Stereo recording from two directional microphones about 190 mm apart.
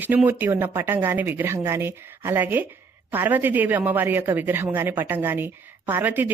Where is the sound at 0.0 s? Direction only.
10° right (ahead or behind).